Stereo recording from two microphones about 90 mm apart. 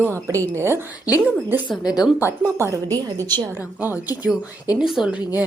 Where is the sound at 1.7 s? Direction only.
45° left (ahead or behind).